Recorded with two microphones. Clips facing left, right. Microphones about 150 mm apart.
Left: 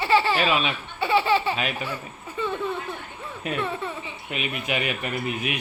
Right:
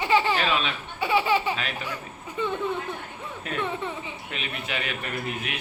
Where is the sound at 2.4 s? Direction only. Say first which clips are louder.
Even; 20° right (ahead or behind).